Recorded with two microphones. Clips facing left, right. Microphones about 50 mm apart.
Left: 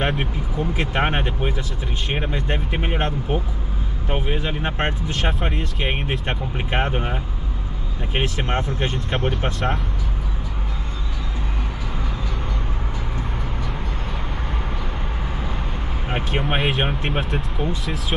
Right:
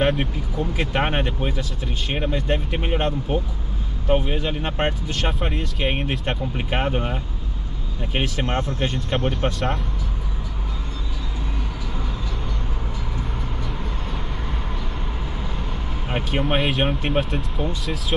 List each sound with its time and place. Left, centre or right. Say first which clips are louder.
0.2 s speech: even; centre
16.1 s speech: right 1 dB; centre